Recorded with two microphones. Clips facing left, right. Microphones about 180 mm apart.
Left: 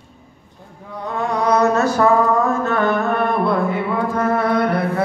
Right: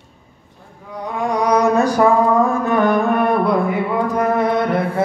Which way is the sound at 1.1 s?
10° right (ahead or behind).